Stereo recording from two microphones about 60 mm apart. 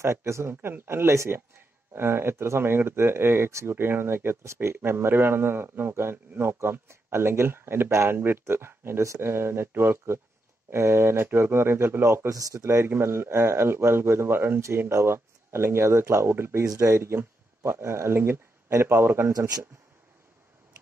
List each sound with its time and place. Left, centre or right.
0.0 s a man's voice: right
2.0 s a man's voice: right
12.3 s speech: right
12.6 s a man's voice: right